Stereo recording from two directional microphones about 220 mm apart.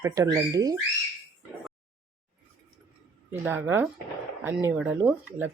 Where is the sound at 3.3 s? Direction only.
10° right (ahead or behind).